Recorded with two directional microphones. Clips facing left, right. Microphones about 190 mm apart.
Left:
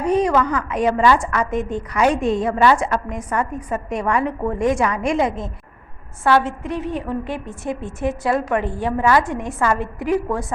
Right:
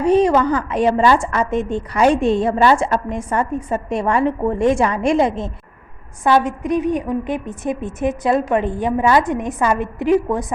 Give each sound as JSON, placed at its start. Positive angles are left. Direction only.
{"t": 0.0, "sound": "a woman's voice", "side_deg": -30}
{"t": 6.2, "sound": "a woman's voice", "side_deg": -15}